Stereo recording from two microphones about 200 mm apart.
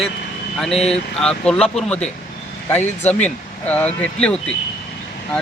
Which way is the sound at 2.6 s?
10° left (ahead or behind).